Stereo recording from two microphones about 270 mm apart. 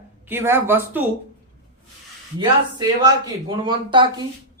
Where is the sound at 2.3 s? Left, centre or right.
Centre.